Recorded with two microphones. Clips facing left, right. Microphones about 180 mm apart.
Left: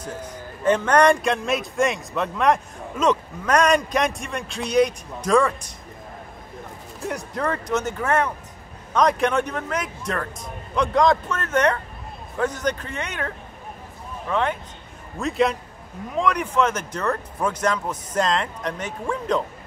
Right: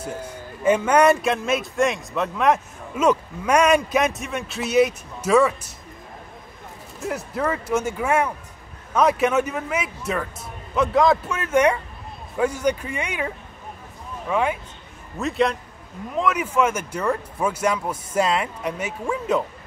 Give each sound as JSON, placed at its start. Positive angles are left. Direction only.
{"t": 0.0, "sound": "speech", "side_deg": -10}
{"t": 7.0, "sound": "speech", "side_deg": -5}